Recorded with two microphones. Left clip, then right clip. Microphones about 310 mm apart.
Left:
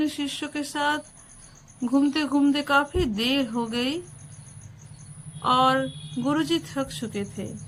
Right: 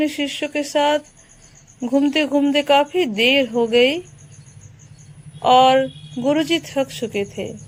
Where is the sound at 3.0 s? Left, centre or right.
Centre.